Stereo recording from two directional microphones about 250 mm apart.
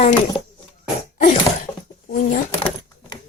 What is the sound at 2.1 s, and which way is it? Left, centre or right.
Speech, left.